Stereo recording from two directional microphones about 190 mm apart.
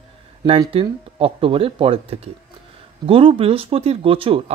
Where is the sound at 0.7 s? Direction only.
30° right (ahead or behind).